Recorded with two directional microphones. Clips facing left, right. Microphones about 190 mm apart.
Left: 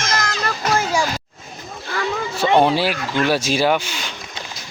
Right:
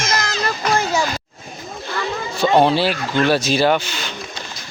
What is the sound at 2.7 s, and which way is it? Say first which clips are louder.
Speech: right 1 dB; 10° left (ahead or behind).